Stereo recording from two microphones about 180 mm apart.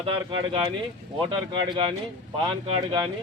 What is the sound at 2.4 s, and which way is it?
Speech, 30° right (ahead or behind).